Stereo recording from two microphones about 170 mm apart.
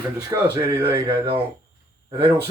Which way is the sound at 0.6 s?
15° right (ahead or behind).